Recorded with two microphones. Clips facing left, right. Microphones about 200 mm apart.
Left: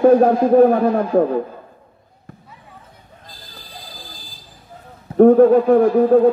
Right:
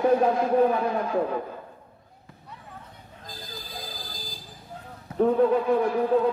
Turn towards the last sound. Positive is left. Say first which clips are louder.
# left 10 dB
turn(degrees=50)  # may be behind; listen again after turning